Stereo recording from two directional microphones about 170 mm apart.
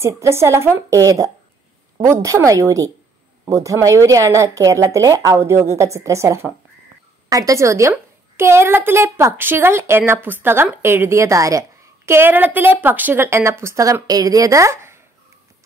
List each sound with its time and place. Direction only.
0.0 s a woman's voice: 15° right (ahead or behind)